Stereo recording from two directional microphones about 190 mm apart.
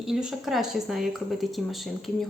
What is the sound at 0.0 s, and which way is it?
A woman's voice, centre (ahead or behind).